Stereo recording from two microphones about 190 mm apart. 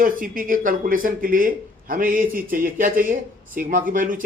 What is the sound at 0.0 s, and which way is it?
Speech, 45° right (ahead or behind).